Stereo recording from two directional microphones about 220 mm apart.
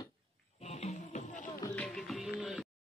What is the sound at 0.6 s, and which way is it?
Music, 30° left (ahead or behind).